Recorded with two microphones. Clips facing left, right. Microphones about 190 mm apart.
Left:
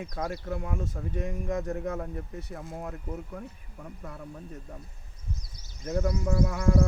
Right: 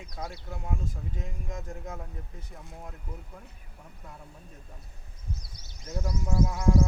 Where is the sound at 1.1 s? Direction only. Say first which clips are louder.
Left 9 dB; 70° left (ahead or behind).